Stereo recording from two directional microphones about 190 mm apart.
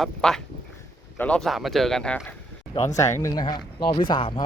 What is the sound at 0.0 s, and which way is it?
Speech, centre (ahead or behind).